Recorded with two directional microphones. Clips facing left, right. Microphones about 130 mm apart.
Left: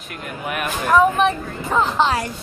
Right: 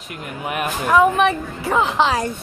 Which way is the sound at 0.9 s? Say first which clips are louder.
Even; 10° right (ahead or behind).